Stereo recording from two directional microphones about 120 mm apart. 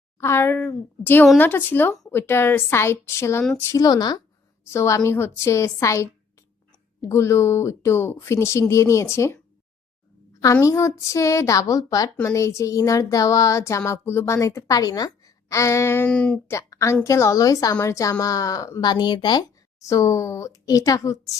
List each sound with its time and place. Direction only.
0.2 s a woman's voice: 20° left (ahead or behind)
4.6 s speech: 20° left (ahead or behind)
10.4 s speech: 25° left (ahead or behind)
16.1 s a woman's voice: 10° left (ahead or behind)
16.5 s speech: 25° left (ahead or behind)
19.8 s speech: 25° left (ahead or behind)